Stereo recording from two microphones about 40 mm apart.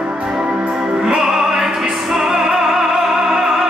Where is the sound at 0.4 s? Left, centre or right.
Right.